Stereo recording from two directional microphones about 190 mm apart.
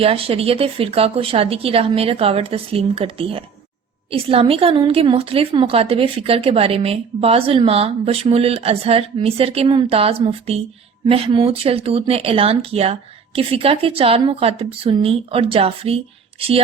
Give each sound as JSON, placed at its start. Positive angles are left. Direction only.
{"t": 0.0, "sound": "a woman's voice", "side_deg": -30}